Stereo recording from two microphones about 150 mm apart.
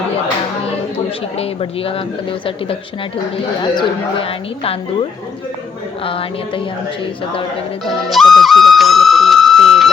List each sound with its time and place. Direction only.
0.9 s speech: 40° left (ahead or behind)
3.6 s speech: 35° left (ahead or behind)
6.1 s speech: 35° left (ahead or behind)
8.1 s music: centre (ahead or behind)